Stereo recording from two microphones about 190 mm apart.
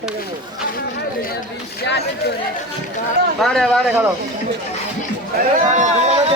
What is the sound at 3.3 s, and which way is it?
Speech, centre (ahead or behind).